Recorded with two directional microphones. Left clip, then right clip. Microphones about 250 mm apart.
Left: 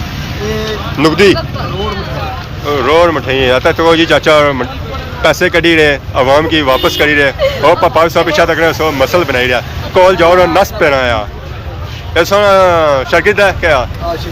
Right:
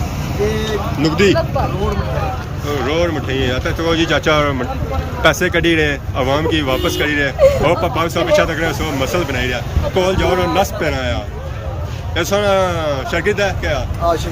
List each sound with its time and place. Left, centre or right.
1.0 s speech: centre
2.6 s speech: centre
7.3 s speech: right
7.6 s speech: centre